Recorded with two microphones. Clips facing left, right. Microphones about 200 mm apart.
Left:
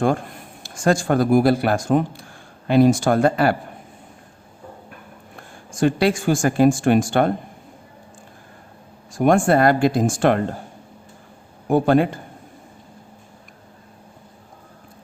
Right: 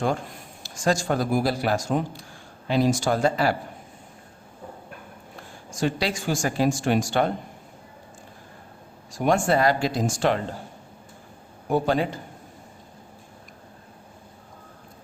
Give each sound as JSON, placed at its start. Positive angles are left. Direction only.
{"t": 0.0, "sound": "speech", "side_deg": 55}
{"t": 5.7, "sound": "speech", "side_deg": 55}
{"t": 9.1, "sound": "speech", "side_deg": 55}
{"t": 11.7, "sound": "speech", "side_deg": 55}